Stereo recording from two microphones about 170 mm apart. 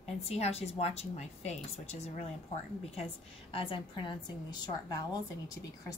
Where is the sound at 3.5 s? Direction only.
30° left (ahead or behind).